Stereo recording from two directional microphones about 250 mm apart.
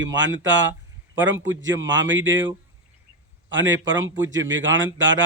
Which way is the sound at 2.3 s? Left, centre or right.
Centre.